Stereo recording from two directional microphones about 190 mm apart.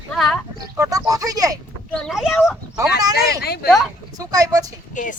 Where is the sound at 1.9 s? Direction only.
Centre (ahead or behind).